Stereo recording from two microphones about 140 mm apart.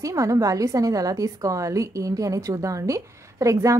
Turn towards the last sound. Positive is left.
turn(degrees=-20)  # may be behind; listen again after turning